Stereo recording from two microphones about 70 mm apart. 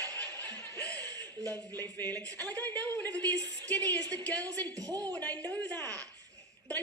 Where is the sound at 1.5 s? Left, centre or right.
Right.